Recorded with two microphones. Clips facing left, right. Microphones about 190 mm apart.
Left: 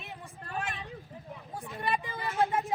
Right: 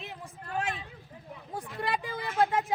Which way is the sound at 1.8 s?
90° right.